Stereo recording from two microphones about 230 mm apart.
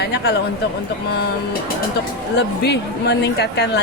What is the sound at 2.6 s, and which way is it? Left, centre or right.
Speech, left.